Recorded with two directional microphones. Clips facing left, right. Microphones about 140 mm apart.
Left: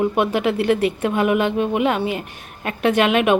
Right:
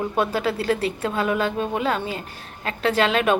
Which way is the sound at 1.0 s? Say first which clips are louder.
Left 4 dB; 15° left (ahead or behind).